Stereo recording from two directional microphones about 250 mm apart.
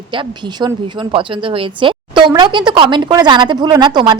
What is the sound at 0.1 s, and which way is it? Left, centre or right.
A woman's voice, centre.